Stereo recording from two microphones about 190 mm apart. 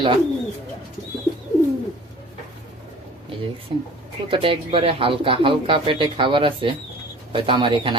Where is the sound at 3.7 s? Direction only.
25° right (ahead or behind).